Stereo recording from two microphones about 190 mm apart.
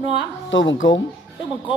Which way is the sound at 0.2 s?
85° left.